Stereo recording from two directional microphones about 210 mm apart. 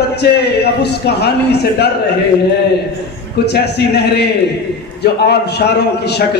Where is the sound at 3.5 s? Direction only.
50° left (ahead or behind).